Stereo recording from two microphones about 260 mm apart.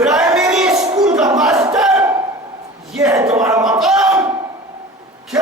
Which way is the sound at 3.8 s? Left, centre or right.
Centre.